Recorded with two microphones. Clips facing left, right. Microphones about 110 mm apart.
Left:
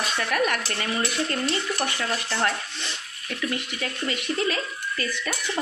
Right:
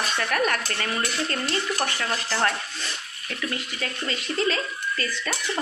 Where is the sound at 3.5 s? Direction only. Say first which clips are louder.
Left 1 dB; 20° left (ahead or behind).